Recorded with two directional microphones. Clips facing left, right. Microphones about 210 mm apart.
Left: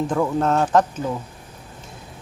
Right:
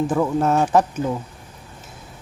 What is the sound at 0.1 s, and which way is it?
Speech, 5° right (ahead or behind).